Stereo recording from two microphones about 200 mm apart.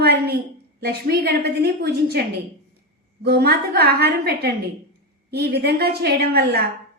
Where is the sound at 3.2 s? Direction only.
50° right (ahead or behind).